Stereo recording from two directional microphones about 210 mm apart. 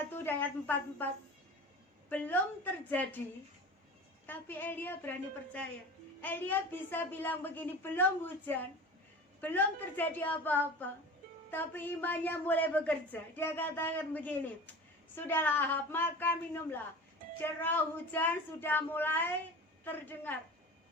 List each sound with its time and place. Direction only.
0.0 s a woman's voice: 10° left (ahead or behind)
2.0 s a woman's voice: 10° left (ahead or behind)
4.3 s a woman's voice: 10° left (ahead or behind)
6.2 s a woman's voice: 10° left (ahead or behind)